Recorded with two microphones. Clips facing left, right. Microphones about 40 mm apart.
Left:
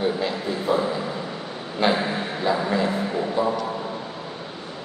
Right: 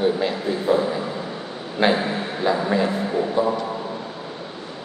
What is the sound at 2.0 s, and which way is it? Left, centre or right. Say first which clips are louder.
Speech: right 1 dB; centre.